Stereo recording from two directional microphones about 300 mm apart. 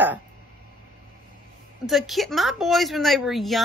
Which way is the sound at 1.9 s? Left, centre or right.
Centre.